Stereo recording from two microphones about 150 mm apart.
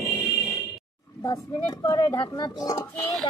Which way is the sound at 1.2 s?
25° left (ahead or behind).